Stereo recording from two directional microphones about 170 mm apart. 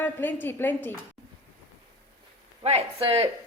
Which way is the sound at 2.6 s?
35° right (ahead or behind).